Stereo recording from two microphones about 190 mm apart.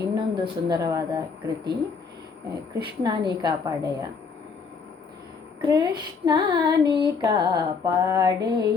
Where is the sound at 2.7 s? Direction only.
20° right (ahead or behind).